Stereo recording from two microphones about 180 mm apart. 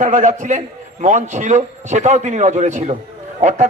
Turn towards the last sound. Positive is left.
turn(degrees=-40)  # may be behind; listen again after turning